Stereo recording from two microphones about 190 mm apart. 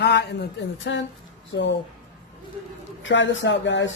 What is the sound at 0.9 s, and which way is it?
Speech, 65° left (ahead or behind).